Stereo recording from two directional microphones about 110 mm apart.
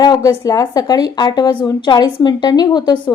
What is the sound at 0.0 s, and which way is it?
A woman's voice, 35° left (ahead or behind).